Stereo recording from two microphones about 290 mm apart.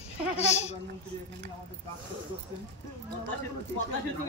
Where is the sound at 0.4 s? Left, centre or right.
Left.